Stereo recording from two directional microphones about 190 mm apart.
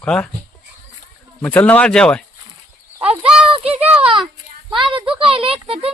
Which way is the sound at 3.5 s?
30° right (ahead or behind).